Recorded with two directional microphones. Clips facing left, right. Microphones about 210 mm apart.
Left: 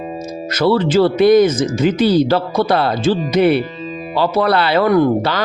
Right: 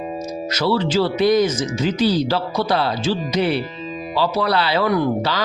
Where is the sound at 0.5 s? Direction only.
55° left (ahead or behind).